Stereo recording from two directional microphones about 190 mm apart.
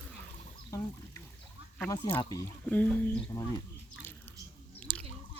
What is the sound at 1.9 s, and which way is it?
Speech, 20° left (ahead or behind).